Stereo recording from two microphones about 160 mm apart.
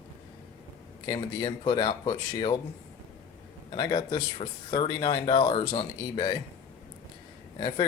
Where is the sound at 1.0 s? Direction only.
30° left (ahead or behind).